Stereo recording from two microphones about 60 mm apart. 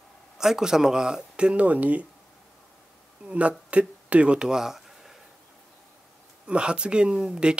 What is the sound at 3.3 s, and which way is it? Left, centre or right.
Speech, right.